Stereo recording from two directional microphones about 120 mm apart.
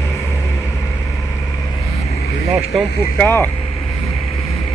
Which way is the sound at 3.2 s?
20° left (ahead or behind).